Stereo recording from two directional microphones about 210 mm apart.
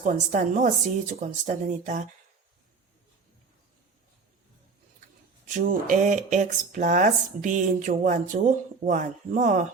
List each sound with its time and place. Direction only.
0.0 s speech: 35° right (ahead or behind)
5.5 s speech: 35° right (ahead or behind)